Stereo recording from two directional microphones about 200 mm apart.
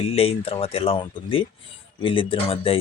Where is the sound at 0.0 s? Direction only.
30° left (ahead or behind).